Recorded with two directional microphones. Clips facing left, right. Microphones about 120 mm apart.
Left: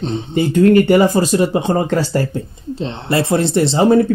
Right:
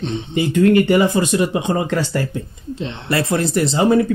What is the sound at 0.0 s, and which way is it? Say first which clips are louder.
Speech: left 3 dB; 35° left (ahead or behind).